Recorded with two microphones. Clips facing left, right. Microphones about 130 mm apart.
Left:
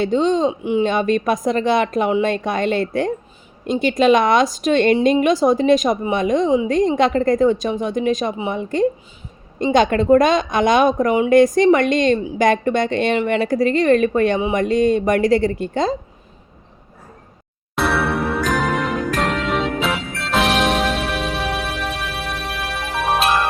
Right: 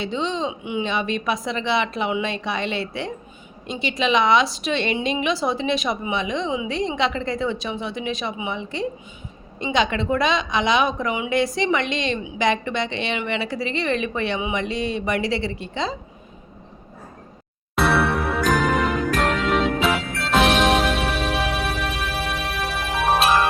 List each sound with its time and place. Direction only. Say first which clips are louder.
0.0 s speech: left 8 dB; 45° left (ahead or behind)
17.7 s music: even; centre (ahead or behind)